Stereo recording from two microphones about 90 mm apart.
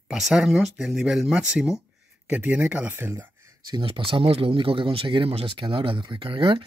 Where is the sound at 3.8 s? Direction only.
75° right (ahead or behind).